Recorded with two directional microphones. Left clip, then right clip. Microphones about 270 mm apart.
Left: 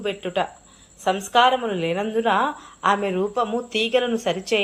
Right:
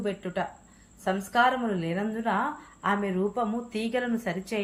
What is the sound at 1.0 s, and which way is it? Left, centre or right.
A woman's voice, left.